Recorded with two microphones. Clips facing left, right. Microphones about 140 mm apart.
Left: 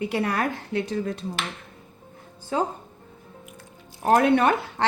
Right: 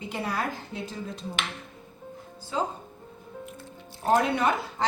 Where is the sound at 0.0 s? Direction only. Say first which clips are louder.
Left 6 dB; 65° left (ahead or behind).